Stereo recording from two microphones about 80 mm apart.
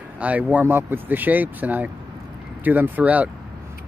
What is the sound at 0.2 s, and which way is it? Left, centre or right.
Speech, centre.